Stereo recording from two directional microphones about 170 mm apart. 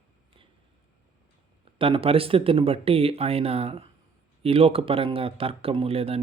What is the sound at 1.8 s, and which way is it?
Speech, 35° right (ahead or behind).